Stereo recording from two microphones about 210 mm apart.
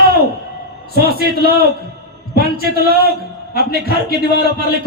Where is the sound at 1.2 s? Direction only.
50° right (ahead or behind).